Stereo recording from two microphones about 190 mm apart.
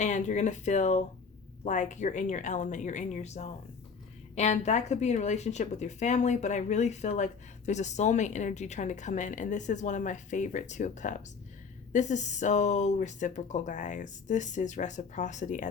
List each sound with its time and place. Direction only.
0.0 s speech: 40° left (ahead or behind)